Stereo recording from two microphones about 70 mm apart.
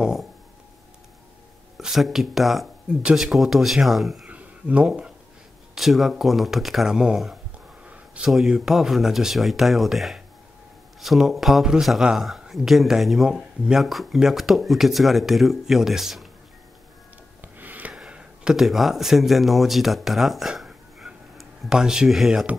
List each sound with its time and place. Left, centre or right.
0.0 s speech: centre
1.8 s speech: centre
2.9 s speech: centre
4.3 s a sound: centre
5.8 s speech: centre
7.8 s a sound: centre
8.3 s speech: centre
17.4 s a sound: right
17.9 s speech: centre